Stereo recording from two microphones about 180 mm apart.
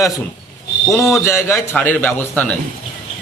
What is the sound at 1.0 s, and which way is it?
A man's voice, 15° left (ahead or behind).